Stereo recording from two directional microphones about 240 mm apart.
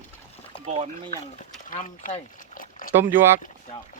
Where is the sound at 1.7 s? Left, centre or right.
Left.